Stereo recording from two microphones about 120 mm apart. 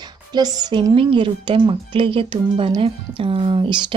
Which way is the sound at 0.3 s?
35° right (ahead or behind).